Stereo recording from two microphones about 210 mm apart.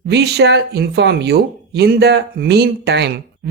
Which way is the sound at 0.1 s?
50° right (ahead or behind).